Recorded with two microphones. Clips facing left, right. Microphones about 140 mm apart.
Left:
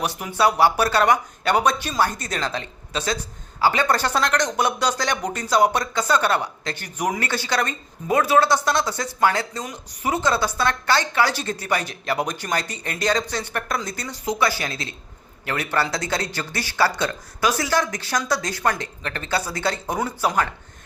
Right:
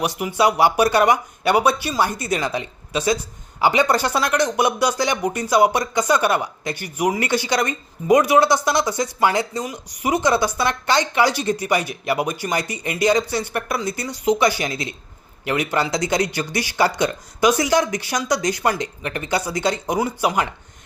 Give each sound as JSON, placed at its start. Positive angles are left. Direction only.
{"t": 0.0, "sound": "speech", "side_deg": -10}